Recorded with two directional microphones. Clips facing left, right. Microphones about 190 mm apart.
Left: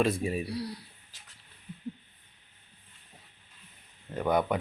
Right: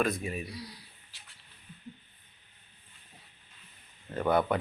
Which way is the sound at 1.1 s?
45° left (ahead or behind).